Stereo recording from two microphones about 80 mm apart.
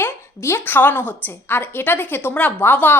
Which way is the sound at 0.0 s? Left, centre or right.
Left.